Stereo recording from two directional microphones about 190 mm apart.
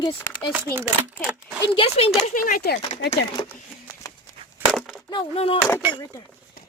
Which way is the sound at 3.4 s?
30° left (ahead or behind).